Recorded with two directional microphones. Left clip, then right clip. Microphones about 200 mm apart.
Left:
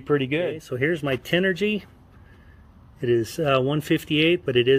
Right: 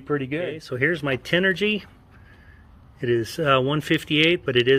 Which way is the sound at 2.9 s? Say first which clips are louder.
Left 1 dB; 5° left (ahead or behind).